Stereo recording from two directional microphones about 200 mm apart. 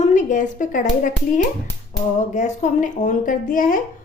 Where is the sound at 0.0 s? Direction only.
35° left (ahead or behind).